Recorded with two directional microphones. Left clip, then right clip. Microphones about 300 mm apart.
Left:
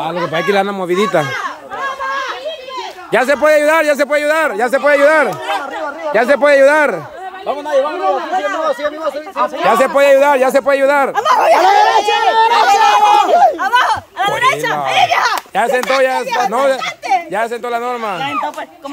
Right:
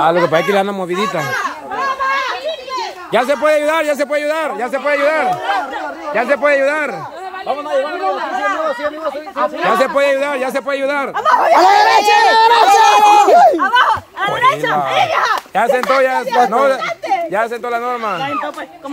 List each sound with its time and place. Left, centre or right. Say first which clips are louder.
0.0 s a man's voice: right 5 dB; centre
1.3 s children playing: right 2 dB; right
3.1 s a man's voice: left 2 dB; centre
7.4 s speech: left 3 dB; left
9.7 s a man's voice: left 4 dB; centre
11.1 s speech: right 4 dB; left
11.6 s chatter: right 1 dB; right
13.6 s a sound: right 1 dB; left
14.4 s speech: right 3 dB; left
15.5 s a man's voice: right 2 dB; centre